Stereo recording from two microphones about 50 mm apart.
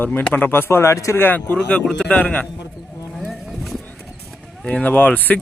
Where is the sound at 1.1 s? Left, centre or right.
Left.